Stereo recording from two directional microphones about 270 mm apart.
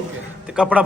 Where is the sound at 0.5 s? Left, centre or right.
Centre.